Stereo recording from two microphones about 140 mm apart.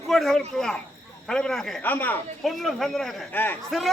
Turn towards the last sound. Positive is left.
turn(degrees=0)  # may be behind; listen again after turning